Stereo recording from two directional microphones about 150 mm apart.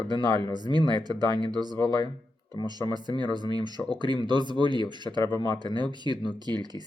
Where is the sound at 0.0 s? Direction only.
30° right (ahead or behind).